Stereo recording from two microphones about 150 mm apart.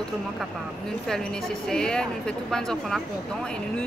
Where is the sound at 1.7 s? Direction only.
5° left (ahead or behind).